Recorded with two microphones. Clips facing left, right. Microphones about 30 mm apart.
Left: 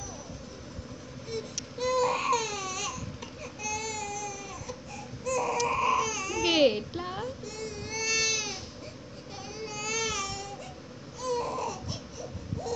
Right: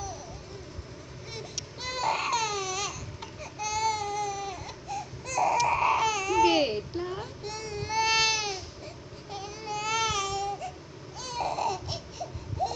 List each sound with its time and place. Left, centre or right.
1.8 s baby cry: right
3.6 s baby cry: right
3.9 s baby cry: right
6.4 s babbling: left
7.4 s a sound: right
7.8 s baby cry: right
9.3 s baby cry: centre
9.7 s baby cry: right
11.1 s baby cry: right